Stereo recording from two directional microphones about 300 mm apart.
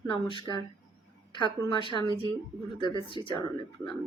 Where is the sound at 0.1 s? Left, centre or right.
Centre.